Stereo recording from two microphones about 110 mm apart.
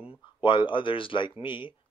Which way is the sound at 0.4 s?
50° left (ahead or behind).